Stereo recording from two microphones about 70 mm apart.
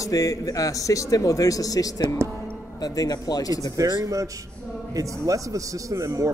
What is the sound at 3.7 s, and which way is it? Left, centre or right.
Speech, right.